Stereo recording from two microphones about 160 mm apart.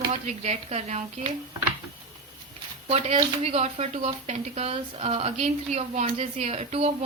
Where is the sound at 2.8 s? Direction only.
40° right (ahead or behind).